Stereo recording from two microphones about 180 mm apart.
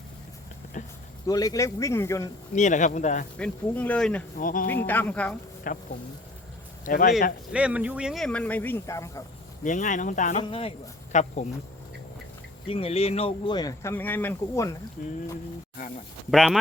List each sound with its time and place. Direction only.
1.3 s speech: 20° left (ahead or behind)
2.6 s speech: 45° left (ahead or behind)
3.3 s speech: 10° left (ahead or behind)
4.4 s speech: 50° left (ahead or behind)
4.7 s speech: 10° left (ahead or behind)
5.7 s speech: 50° left (ahead or behind)
6.8 s speech: 50° left (ahead or behind)
7.5 s speech: 5° right (ahead or behind); by 9.2 s 15° left (ahead or behind)
9.6 s speech: 45° left (ahead or behind)
10.4 s speech: 30° left (ahead or behind)
12.6 s speech: 30° left (ahead or behind); by 14.8 s 15° left (ahead or behind)
15.0 s speech: 45° left (ahead or behind)
16.3 s speech: centre (ahead or behind)